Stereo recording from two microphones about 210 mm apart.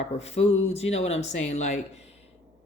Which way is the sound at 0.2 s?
30° left (ahead or behind).